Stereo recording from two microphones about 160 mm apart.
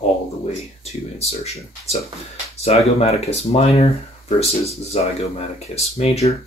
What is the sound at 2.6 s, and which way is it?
Speech, 40° left (ahead or behind).